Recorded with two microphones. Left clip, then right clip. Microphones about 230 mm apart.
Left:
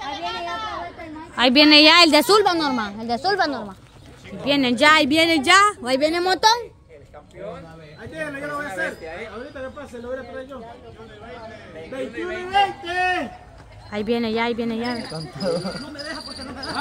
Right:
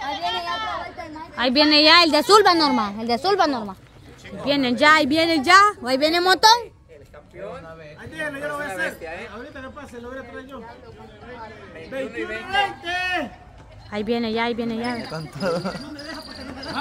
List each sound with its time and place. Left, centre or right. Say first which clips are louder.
0.0 s a sound: right 2 dB; right
1.3 s a woman's voice: left 4 dB; centre
2.5 s speech: right 3 dB; right
4.5 s speech: even; centre
8.1 s a sound: right 1 dB; right
11.9 s a man's voice: even; right
13.8 s speech: left 1 dB; centre
15.1 s speech: even; right